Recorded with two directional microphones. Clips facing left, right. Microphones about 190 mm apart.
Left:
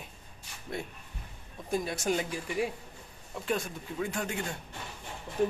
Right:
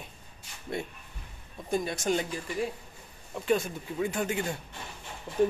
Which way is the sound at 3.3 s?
Centre (ahead or behind).